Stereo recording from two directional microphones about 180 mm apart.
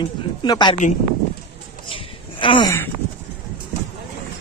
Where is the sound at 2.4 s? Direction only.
25° left (ahead or behind).